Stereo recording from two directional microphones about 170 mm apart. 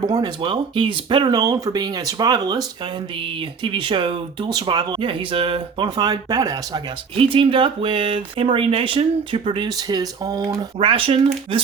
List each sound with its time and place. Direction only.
0.0 s speech: 25° right (ahead or behind)